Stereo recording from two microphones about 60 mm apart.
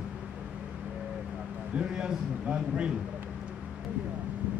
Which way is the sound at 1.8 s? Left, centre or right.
Centre.